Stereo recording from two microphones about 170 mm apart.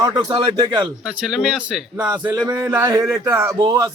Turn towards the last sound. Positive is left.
turn(degrees=-20)  # may be behind; listen again after turning